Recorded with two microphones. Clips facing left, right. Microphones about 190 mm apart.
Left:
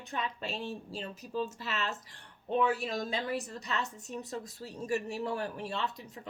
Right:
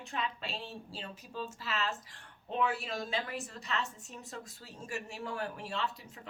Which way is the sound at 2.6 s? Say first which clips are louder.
Left 3 dB; 40° left (ahead or behind).